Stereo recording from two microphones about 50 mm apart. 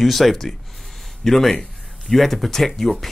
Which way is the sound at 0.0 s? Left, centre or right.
Centre.